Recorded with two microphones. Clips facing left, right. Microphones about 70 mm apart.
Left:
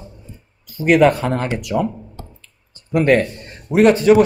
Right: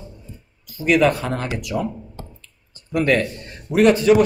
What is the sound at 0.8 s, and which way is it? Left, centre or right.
Speech, left.